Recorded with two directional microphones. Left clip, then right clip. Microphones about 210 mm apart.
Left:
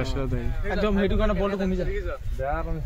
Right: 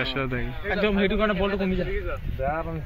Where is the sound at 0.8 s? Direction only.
55° left (ahead or behind).